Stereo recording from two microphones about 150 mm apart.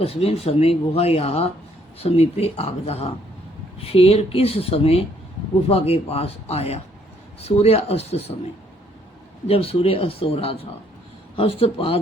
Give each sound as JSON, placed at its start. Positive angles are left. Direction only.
{"t": 0.0, "sound": "speech", "side_deg": 40}
{"t": 9.5, "sound": "speech", "side_deg": 40}